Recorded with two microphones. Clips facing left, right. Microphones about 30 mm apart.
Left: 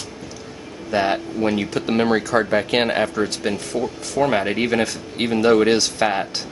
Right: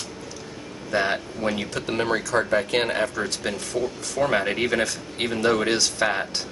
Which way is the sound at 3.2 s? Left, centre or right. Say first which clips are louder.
Left 5 dB; centre.